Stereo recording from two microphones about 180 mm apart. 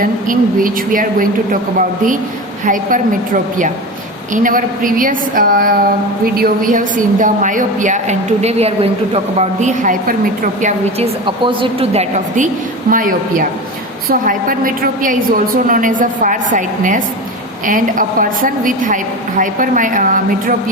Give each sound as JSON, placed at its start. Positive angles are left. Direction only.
{"t": 0.0, "sound": "a woman's voice", "side_deg": -50}
{"t": 2.6, "sound": "a woman's voice", "side_deg": -50}
{"t": 4.4, "sound": "a woman's voice", "side_deg": -50}
{"t": 11.3, "sound": "a woman's voice", "side_deg": -25}
{"t": 12.9, "sound": "a woman's voice", "side_deg": -50}